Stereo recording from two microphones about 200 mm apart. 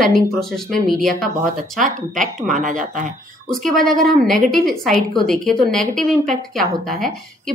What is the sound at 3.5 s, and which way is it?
A woman's voice, centre (ahead or behind).